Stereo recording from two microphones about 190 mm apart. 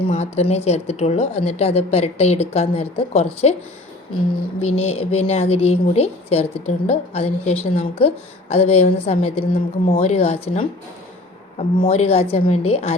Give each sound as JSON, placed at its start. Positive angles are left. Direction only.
{"t": 0.1, "sound": "speech", "side_deg": 35}
{"t": 4.6, "sound": "speech", "side_deg": 35}